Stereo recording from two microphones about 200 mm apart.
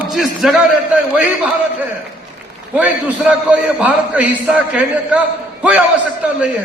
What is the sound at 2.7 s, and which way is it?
A man's voice, 5° right (ahead or behind).